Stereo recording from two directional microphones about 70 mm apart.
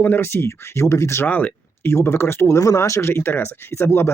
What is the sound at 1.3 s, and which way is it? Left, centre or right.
Speech, left.